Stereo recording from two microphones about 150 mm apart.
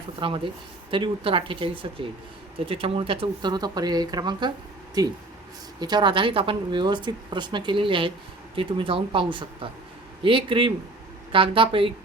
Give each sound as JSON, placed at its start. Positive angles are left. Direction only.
{"t": 0.2, "sound": "a woman's voice", "side_deg": -35}